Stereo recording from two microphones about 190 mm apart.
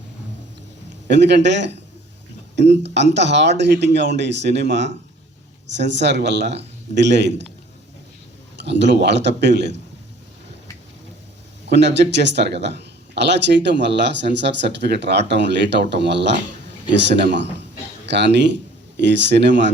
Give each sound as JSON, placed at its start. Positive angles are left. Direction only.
{"t": 1.0, "sound": "a man's voice", "side_deg": -65}
{"t": 8.6, "sound": "speech", "side_deg": -65}
{"t": 11.6, "sound": "a man's voice", "side_deg": -65}